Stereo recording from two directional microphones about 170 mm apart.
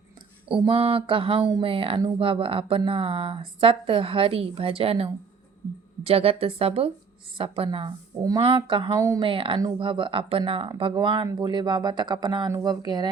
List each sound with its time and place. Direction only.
0.4 s speech: 30° right (ahead or behind)
9.0 s speech: 20° right (ahead or behind)
9.2 s speech: 30° right (ahead or behind)